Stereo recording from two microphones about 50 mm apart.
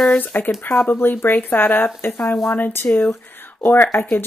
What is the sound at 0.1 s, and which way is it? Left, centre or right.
Speech, left.